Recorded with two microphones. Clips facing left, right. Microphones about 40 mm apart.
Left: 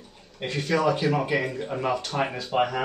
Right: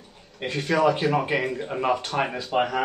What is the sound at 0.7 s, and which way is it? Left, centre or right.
Speech, right.